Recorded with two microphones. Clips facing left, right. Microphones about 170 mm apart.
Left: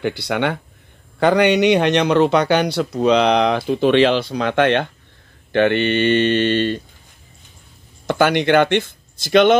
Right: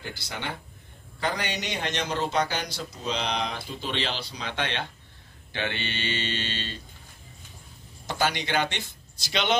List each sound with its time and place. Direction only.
0.0 s a man's voice: 70° left (ahead or behind)
8.1 s speech: 60° left (ahead or behind)